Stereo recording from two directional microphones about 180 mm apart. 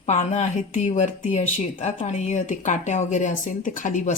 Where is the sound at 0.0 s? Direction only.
40° left (ahead or behind).